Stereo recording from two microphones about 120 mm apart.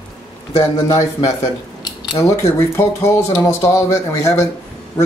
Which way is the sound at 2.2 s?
25° left (ahead or behind).